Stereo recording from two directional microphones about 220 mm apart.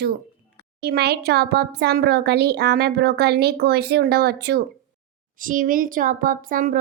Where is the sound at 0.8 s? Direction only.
45° right (ahead or behind).